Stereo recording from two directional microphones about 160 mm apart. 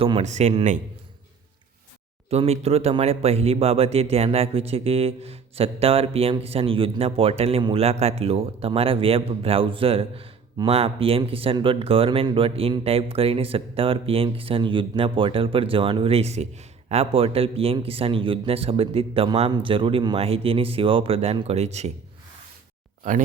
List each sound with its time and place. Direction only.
0.2 s a man's voice: 45° right (ahead or behind)
2.3 s speech: 40° right (ahead or behind)
23.1 s speech: 55° right (ahead or behind)